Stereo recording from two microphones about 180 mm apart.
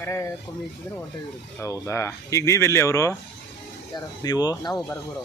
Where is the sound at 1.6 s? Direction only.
15° left (ahead or behind).